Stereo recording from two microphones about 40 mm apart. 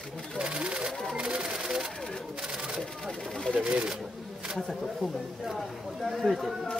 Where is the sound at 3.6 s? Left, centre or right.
Right.